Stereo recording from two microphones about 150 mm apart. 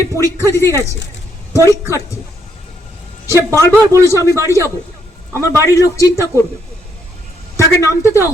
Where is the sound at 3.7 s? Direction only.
20° right (ahead or behind).